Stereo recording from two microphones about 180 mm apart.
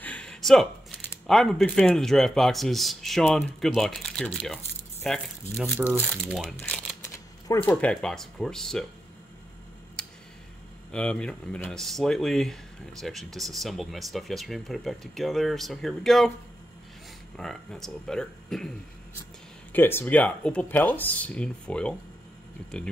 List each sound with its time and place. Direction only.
0.0 s a sound: 5° left (ahead or behind)
1.2 s speech: centre (ahead or behind)
6.6 s typewriter: 5° left (ahead or behind)
7.4 s speech: 15° left (ahead or behind)
7.7 s speech: 5° left (ahead or behind)
10.0 s tick: 5° left (ahead or behind)
10.9 s speech: 5° left (ahead or behind)
17.4 s speech: centre (ahead or behind)
19.7 s speech: 10° left (ahead or behind)